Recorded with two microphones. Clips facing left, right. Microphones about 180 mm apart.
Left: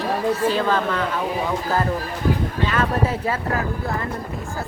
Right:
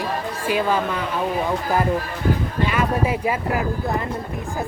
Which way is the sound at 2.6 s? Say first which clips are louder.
Even; 10° right (ahead or behind).